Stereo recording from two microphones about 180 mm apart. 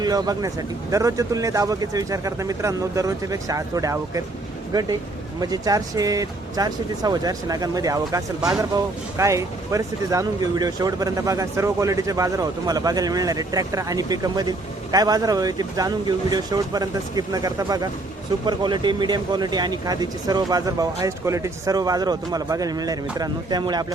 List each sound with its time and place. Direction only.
0.0 s speech: 20° right (ahead or behind)
8.4 s speech: 5° right (ahead or behind)
8.7 s speech: 15° right (ahead or behind)